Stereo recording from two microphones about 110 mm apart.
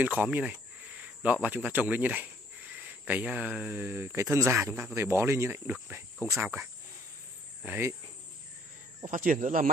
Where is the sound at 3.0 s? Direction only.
15° right (ahead or behind).